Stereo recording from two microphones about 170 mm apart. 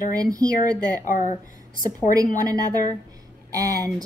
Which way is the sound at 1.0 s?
50° left (ahead or behind).